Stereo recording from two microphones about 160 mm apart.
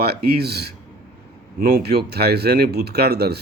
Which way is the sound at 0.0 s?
85° right.